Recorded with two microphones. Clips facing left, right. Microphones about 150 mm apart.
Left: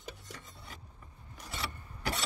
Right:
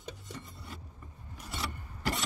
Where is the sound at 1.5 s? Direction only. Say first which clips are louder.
Right 2 dB; centre (ahead or behind).